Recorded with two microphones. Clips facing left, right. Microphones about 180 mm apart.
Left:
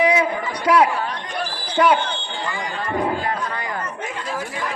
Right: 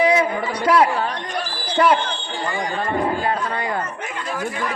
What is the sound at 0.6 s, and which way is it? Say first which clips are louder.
Speech: even; 10° left (ahead or behind).